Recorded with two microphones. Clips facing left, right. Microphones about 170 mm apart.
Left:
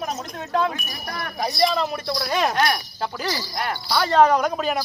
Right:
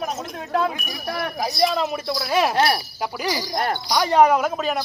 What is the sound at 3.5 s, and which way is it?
Speech, 45° right (ahead or behind).